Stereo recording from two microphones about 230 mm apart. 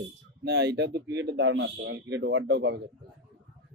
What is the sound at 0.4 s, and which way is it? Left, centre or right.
A man's voice, right.